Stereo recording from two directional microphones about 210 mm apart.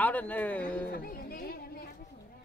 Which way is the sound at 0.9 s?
45° left (ahead or behind).